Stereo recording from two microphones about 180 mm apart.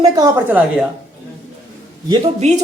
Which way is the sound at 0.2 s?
15° right (ahead or behind).